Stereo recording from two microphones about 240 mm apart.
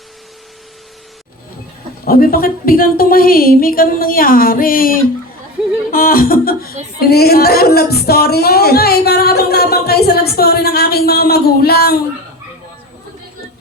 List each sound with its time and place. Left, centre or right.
2.0 s speech: left